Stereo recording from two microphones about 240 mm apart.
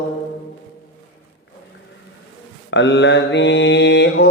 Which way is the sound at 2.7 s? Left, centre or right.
Left.